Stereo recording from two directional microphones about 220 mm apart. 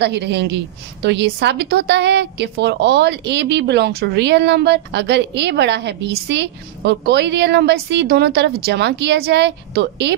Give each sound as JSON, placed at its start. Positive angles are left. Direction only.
{"t": 0.0, "sound": "a woman's voice", "side_deg": -50}